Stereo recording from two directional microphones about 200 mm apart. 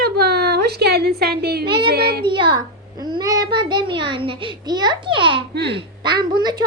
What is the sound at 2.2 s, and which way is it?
A child's voice, 25° right (ahead or behind).